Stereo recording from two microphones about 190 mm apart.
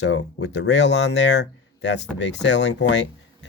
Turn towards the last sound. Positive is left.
turn(degrees=65)  # may be behind; listen again after turning